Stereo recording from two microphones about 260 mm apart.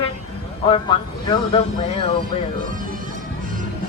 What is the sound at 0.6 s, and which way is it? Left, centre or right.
Speech, centre.